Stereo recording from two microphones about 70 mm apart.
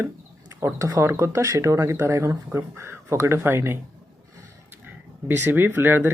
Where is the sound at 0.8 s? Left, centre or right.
Right.